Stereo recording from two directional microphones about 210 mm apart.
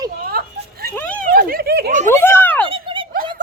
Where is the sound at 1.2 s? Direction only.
45° right (ahead or behind).